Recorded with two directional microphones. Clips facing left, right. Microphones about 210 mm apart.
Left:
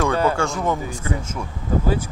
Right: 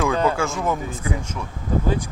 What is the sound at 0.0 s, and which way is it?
Speech, centre (ahead or behind).